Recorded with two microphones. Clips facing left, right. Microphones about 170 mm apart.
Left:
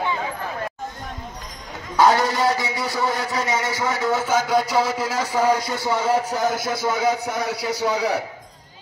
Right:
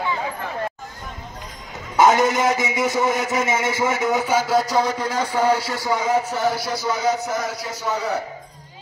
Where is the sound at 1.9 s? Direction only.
20° right (ahead or behind); by 5.7 s 15° left (ahead or behind).